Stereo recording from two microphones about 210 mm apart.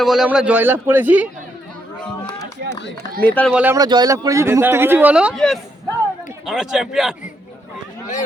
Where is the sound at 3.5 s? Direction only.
5° right (ahead or behind).